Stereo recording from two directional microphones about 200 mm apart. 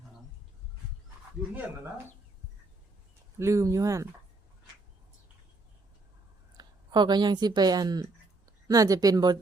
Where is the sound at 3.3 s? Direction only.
15° right (ahead or behind).